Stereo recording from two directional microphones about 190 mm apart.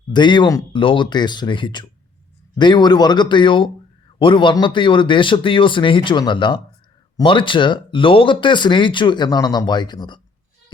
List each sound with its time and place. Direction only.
0.1 s speech: 25° left (ahead or behind)